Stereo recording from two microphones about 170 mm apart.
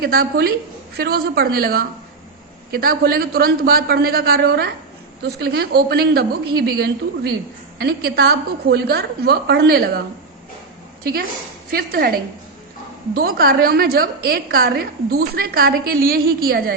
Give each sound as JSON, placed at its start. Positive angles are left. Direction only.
{"t": 0.0, "sound": "a woman's voice", "side_deg": -60}
{"t": 11.0, "sound": "a woman's voice", "side_deg": -65}